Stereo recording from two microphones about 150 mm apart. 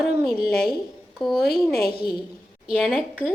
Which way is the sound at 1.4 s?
90° left.